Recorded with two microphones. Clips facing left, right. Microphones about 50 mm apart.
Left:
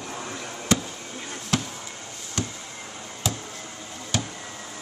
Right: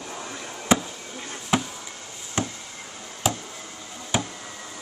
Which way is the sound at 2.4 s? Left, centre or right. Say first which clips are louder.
Right 3 dB; right.